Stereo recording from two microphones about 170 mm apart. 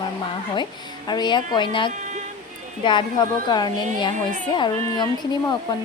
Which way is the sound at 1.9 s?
45° right (ahead or behind).